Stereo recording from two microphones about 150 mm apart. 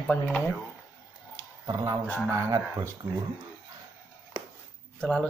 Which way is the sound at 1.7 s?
25° right (ahead or behind).